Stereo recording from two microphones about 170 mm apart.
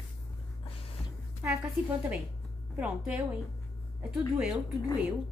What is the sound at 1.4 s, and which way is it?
Speech, 10° right (ahead or behind).